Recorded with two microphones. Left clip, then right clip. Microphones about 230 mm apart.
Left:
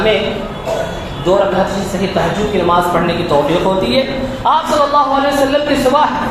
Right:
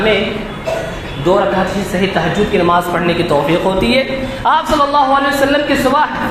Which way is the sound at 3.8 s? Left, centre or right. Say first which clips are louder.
Right 1 dB; right.